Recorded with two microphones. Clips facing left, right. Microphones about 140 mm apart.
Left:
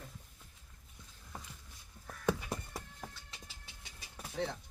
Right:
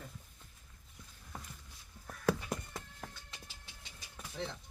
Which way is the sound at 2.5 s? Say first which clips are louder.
Right 1 dB; 30° left (ahead or behind).